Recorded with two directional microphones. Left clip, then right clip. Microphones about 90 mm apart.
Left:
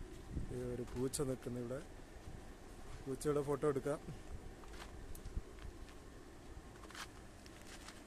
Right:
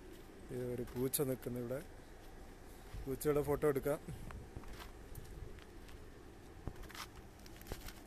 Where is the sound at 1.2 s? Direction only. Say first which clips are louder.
Right 2 dB; 20° right (ahead or behind).